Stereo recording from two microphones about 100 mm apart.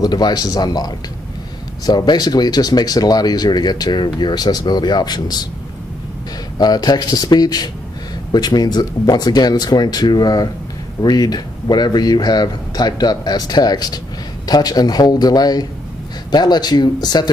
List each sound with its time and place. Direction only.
0.0 s speech: 45° left (ahead or behind)
6.6 s speech: 45° left (ahead or behind)